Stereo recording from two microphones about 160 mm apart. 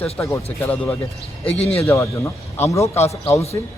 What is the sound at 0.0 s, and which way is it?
Speech, 15° left (ahead or behind).